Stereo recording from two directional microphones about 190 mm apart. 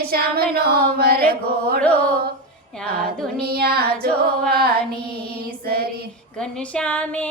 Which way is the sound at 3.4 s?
55° right (ahead or behind).